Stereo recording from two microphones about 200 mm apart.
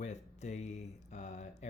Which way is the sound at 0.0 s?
35° left (ahead or behind).